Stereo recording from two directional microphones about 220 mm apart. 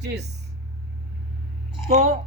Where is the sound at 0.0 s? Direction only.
50° right (ahead or behind).